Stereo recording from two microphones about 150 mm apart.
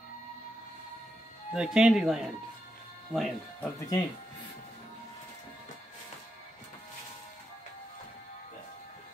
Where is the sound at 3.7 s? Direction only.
20° left (ahead or behind).